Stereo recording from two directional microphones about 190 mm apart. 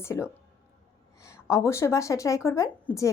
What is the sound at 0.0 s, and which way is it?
A woman's voice, 15° left (ahead or behind).